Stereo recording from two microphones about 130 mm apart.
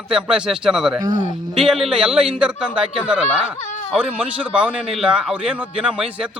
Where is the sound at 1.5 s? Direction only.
Centre (ahead or behind).